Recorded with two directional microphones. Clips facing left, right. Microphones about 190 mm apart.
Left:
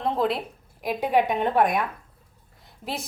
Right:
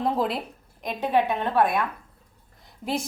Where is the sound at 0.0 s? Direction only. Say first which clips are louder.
Left 1 dB; centre (ahead or behind); by 1.8 s 15° left (ahead or behind).